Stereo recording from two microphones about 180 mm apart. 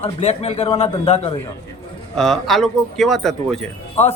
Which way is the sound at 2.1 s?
Centre (ahead or behind).